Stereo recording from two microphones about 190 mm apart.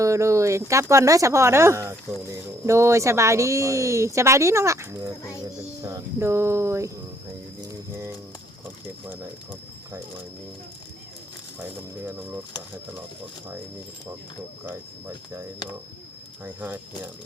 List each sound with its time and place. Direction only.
0.0 s speech: 15° right (ahead or behind)
7.6 s mechanisms: 15° right (ahead or behind)
9.0 s speech: 10° right (ahead or behind)
12.0 s speech: 10° right (ahead or behind)
14.7 s speech: 10° right (ahead or behind)